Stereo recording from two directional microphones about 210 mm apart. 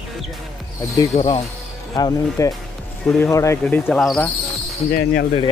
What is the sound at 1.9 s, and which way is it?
Speech, 15° left (ahead or behind).